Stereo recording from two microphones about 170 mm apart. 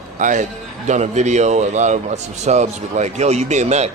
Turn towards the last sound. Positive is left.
turn(degrees=-40)  # may be behind; listen again after turning